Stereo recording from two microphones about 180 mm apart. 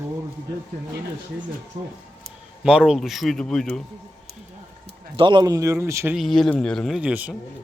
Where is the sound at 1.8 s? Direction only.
35° right (ahead or behind).